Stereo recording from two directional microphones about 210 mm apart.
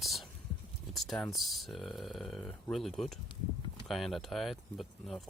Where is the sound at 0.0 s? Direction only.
Centre (ahead or behind).